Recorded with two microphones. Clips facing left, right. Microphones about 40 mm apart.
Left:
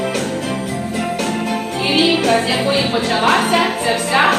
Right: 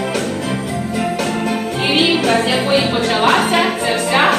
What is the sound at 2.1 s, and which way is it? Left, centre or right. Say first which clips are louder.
Music: even; centre.